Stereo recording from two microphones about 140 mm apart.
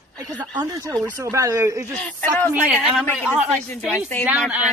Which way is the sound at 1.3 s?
20° right (ahead or behind).